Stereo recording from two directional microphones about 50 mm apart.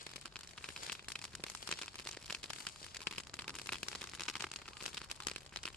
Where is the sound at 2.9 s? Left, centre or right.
Centre.